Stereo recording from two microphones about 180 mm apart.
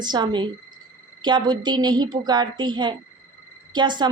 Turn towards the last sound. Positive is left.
turn(degrees=-25)  # may be behind; listen again after turning